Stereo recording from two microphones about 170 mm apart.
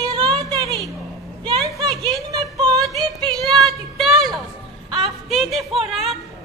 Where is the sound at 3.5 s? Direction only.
Centre (ahead or behind).